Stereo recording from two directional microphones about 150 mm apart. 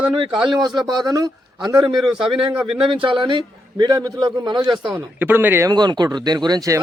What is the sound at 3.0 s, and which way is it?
A man's voice, 35° right (ahead or behind).